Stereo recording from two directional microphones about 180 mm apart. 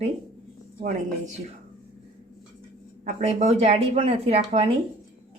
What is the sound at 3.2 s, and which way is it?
Speech, 35° right (ahead or behind).